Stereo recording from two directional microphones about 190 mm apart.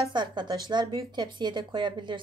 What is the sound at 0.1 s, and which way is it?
Speech, 25° right (ahead or behind).